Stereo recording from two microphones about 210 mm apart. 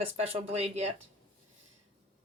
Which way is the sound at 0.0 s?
30° right (ahead or behind).